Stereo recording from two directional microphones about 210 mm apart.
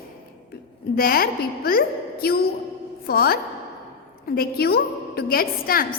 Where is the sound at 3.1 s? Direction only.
45° left (ahead or behind).